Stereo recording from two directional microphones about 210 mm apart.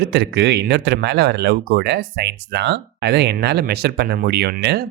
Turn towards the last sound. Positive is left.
turn(degrees=-50)  # may be behind; listen again after turning